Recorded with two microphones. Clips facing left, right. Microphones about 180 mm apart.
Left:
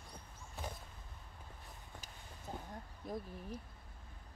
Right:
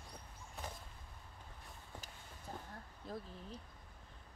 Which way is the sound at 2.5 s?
15° left (ahead or behind).